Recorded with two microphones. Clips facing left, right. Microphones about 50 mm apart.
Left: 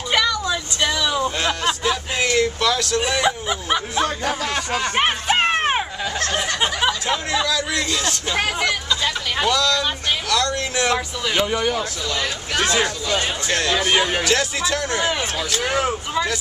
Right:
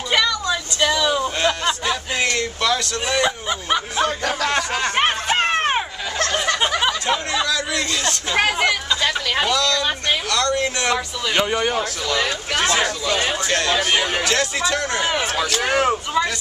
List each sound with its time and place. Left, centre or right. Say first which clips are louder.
0.1 s a sound: even; centre
6.8 s speech: right 1 dB; centre
8.4 s speech: right 4 dB; centre
9.5 s a man's voice: even; centre
14.1 s a man's voice: even; centre
15.6 s speech: right 2 dB; right